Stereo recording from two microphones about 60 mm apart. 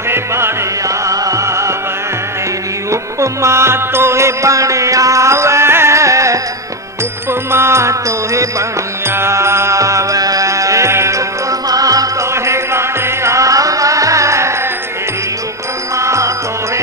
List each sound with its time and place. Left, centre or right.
0.1 s music: right
2.9 s music: right
7.5 s music: right
9.0 s music: right
11.7 s music: right
16.0 s music: right